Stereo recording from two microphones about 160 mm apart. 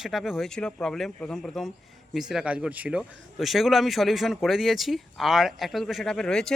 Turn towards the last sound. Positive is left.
turn(degrees=5)  # may be behind; listen again after turning